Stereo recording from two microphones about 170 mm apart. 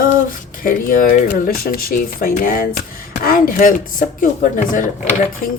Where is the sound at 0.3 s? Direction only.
55° left (ahead or behind).